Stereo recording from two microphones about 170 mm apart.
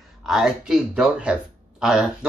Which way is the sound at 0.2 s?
Centre (ahead or behind).